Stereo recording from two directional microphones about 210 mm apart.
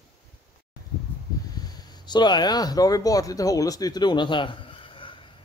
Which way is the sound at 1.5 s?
20° left (ahead or behind).